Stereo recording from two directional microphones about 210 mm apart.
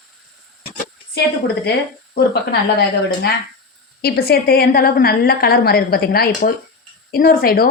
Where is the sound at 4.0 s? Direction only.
50° left (ahead or behind).